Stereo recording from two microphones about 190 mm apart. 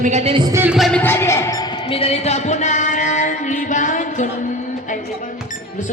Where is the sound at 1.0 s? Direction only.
15° left (ahead or behind).